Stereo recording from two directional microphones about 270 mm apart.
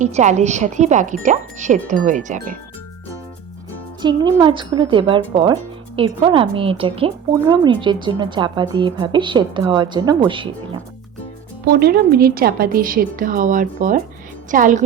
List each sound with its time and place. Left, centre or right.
0.0 s speech: right
4.0 s speech: centre
11.6 s a woman's voice: right